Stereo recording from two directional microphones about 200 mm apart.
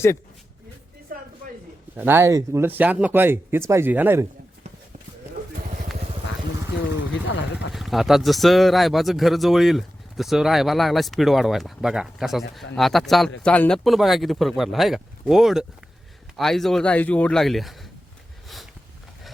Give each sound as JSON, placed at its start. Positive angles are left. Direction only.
{"t": 1.1, "sound": "a sound", "side_deg": -45}
{"t": 2.0, "sound": "speech", "side_deg": -10}
{"t": 7.7, "sound": "speech", "side_deg": 0}
{"t": 18.4, "sound": "sniff", "side_deg": 0}